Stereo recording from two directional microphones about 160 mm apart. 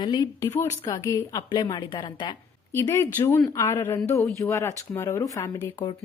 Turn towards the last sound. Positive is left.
turn(degrees=20)  # may be behind; listen again after turning